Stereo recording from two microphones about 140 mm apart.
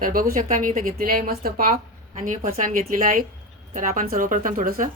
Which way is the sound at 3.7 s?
65° right (ahead or behind).